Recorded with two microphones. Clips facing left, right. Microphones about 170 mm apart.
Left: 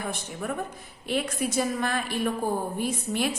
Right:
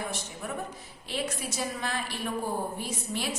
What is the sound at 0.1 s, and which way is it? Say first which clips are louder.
A woman's voice: left 4 dB; 55° left (ahead or behind).